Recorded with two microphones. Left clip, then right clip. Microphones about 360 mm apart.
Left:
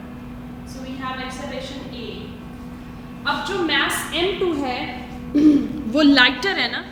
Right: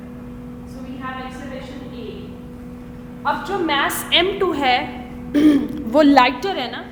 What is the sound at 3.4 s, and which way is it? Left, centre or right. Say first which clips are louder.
A woman's voice: even; right.